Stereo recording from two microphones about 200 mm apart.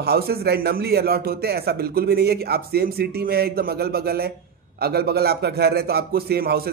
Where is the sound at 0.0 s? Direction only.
50° right (ahead or behind).